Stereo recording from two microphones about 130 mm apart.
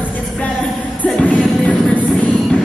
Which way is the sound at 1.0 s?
10° left (ahead or behind).